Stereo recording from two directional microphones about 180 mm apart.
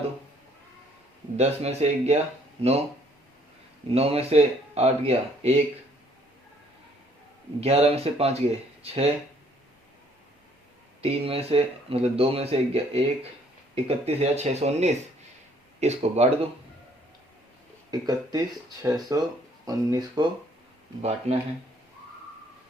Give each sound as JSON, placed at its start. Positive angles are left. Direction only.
{"t": 1.4, "sound": "speech", "side_deg": -35}
{"t": 3.9, "sound": "speech", "side_deg": -35}
{"t": 7.6, "sound": "speech", "side_deg": -35}
{"t": 11.0, "sound": "speech", "side_deg": -35}
{"t": 17.9, "sound": "speech", "side_deg": -20}
{"t": 21.0, "sound": "speech", "side_deg": -35}